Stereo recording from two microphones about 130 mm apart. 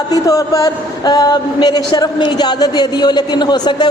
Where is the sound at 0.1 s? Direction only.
25° left (ahead or behind).